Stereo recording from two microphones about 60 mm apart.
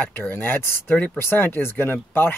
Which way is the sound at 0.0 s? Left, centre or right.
Left.